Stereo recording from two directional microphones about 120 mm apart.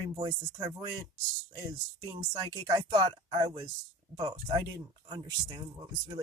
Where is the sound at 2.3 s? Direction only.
35° right (ahead or behind).